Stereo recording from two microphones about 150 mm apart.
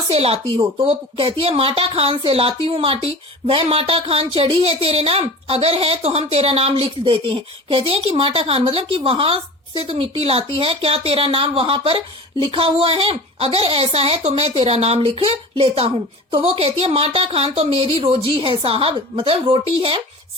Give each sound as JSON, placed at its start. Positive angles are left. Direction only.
{"t": 0.1, "sound": "speech", "side_deg": -40}